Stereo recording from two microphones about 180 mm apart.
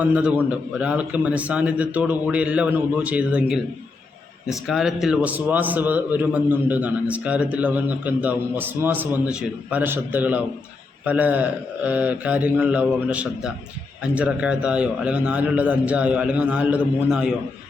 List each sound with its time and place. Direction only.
0.0 s a man's voice: 5° right (ahead or behind)